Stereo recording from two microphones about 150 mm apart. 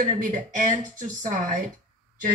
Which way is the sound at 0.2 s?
60° right (ahead or behind).